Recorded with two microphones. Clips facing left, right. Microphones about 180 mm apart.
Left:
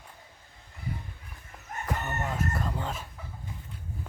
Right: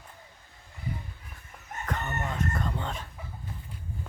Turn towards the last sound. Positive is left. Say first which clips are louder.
# even
turn(degrees=5)  # may be behind; listen again after turning